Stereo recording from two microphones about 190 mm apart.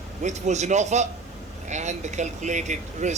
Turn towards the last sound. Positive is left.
turn(degrees=-40)  # may be behind; listen again after turning